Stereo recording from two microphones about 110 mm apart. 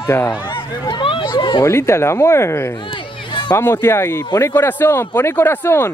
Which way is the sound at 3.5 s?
20° left (ahead or behind).